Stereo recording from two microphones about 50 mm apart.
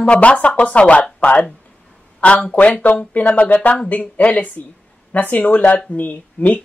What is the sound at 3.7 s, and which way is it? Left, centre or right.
Speech, left.